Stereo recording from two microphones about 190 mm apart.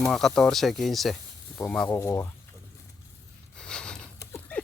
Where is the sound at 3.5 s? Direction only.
5° left (ahead or behind).